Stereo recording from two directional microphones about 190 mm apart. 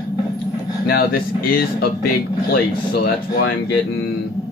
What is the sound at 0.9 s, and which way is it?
Speech, 50° left (ahead or behind).